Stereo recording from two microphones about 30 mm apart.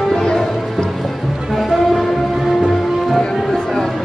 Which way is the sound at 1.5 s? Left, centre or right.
Centre.